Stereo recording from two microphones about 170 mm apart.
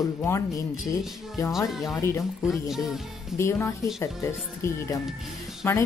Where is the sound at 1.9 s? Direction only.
15° left (ahead or behind).